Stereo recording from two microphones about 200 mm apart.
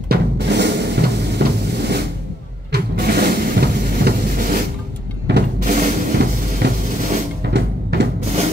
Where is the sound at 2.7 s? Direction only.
50° right (ahead or behind).